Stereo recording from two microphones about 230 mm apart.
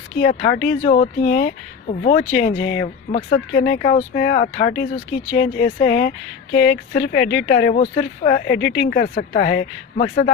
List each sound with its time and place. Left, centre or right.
0.2 s speech: left